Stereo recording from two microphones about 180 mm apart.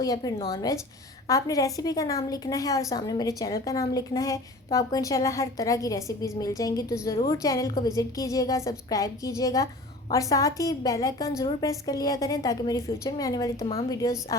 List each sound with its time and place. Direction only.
0.0 s a woman's voice: 20° left (ahead or behind)